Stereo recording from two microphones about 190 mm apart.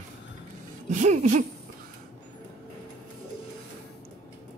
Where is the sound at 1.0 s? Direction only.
40° right (ahead or behind).